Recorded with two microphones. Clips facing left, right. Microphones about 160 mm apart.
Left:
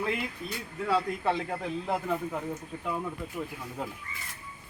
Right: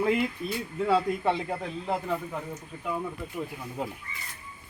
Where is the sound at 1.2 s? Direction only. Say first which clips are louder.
Right 2 dB; 5° right (ahead or behind).